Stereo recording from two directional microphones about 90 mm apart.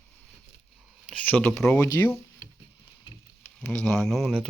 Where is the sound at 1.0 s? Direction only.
15° left (ahead or behind).